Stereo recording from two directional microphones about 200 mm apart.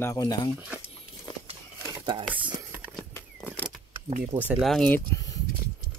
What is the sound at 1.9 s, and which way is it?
Crumpling, 25° right (ahead or behind).